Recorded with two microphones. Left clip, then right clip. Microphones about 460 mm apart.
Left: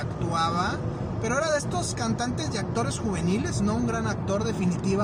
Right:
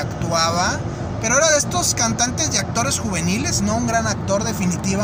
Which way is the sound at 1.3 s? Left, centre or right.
Left.